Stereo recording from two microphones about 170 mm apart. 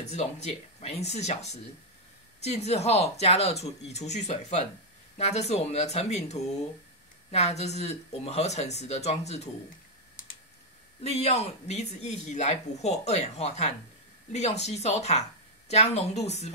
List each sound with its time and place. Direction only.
0.0 s speech: 40° left (ahead or behind)
11.1 s speech: 40° left (ahead or behind)